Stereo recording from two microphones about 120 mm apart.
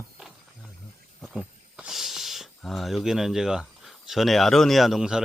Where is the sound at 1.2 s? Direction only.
5° right (ahead or behind).